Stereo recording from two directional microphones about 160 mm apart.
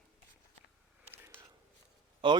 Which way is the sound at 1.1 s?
15° right (ahead or behind).